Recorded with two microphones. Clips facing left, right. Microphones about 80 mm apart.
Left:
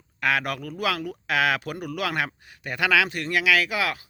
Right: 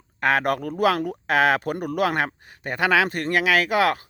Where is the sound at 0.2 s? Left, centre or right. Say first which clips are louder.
Right 4 dB; right.